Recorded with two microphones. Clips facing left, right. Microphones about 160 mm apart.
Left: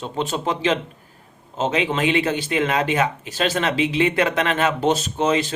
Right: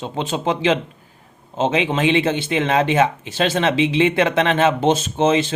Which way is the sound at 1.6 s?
25° right (ahead or behind).